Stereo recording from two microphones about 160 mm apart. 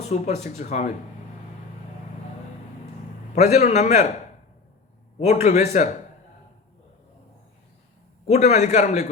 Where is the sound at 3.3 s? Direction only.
45° left (ahead or behind).